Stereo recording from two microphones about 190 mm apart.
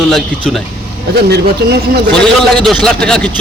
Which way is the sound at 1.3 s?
60° right (ahead or behind).